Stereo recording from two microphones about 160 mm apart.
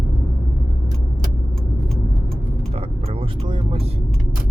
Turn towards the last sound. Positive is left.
turn(degrees=-30)  # may be behind; listen again after turning